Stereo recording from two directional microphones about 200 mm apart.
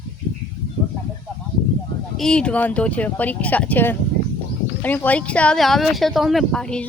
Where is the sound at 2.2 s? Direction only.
5° left (ahead or behind).